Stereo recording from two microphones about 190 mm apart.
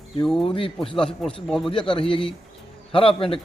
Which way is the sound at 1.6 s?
25° left (ahead or behind).